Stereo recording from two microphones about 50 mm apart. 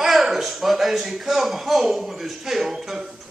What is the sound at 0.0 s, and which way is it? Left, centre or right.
A man's voice, centre.